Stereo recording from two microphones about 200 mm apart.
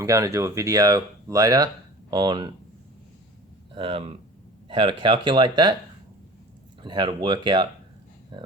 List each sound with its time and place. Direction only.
0.0 s speech: 15° right (ahead or behind)
3.8 s speech: 25° right (ahead or behind)
6.8 s speech: 20° right (ahead or behind)